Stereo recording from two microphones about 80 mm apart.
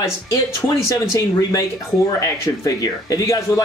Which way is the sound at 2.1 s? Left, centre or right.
Left.